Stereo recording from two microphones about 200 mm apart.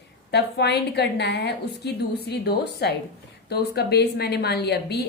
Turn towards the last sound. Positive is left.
turn(degrees=55)  # may be behind; listen again after turning